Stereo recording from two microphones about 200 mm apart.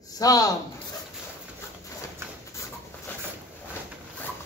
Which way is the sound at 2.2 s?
10° right (ahead or behind).